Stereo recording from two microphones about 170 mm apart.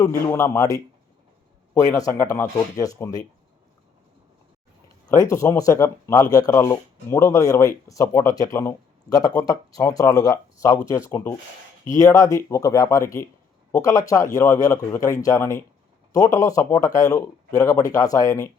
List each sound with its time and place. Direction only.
0.0 s speech: 15° left (ahead or behind)
2.0 s speech: 20° left (ahead or behind)
5.0 s speech: 20° left (ahead or behind)